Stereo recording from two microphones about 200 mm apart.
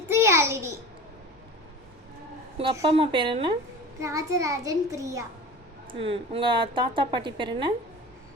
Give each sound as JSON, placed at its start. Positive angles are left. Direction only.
{"t": 0.1, "sound": "a sound", "side_deg": -15}
{"t": 2.6, "sound": "a woman's voice", "side_deg": -30}
{"t": 5.9, "sound": "a woman's voice", "side_deg": -30}